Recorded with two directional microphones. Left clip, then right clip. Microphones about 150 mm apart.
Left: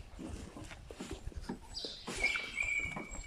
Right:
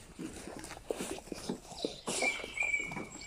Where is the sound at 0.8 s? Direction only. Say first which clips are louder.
Right 11 dB; 55° right (ahead or behind).